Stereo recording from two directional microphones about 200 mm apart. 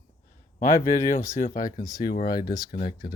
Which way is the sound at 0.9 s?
40° left (ahead or behind).